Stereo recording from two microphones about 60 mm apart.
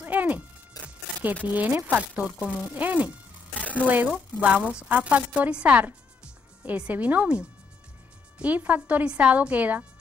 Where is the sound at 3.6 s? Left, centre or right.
Left.